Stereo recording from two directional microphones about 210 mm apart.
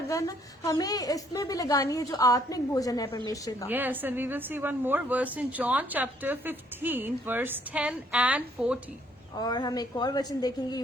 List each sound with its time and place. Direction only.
0.1 s a woman's voice: 15° left (ahead or behind)
3.7 s a woman's voice: 10° right (ahead or behind)
9.4 s a woman's voice: 20° left (ahead or behind)